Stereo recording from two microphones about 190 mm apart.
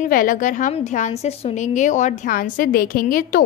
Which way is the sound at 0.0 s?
45° left (ahead or behind).